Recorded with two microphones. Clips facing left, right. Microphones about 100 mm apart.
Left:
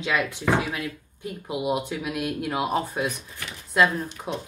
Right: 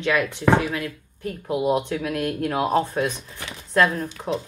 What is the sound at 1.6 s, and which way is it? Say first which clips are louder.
Speech: right 4 dB; 10° left (ahead or behind).